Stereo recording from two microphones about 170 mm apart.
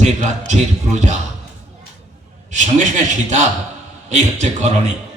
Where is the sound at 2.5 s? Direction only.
45° right (ahead or behind).